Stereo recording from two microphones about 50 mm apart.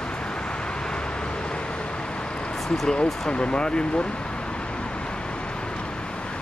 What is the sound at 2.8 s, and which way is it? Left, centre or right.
Speech, centre.